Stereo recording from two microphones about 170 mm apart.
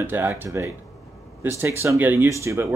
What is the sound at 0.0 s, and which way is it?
Speech, 15° right (ahead or behind).